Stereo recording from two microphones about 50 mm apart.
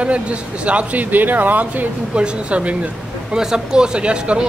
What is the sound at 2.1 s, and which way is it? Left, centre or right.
Speech, right.